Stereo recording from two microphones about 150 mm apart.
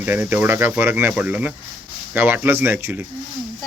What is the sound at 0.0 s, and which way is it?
Speech, 15° right (ahead or behind).